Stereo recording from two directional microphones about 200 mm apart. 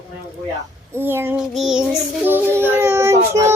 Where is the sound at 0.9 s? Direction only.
10° right (ahead or behind).